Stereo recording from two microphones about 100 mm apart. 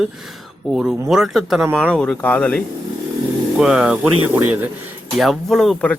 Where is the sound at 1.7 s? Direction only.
10° left (ahead or behind).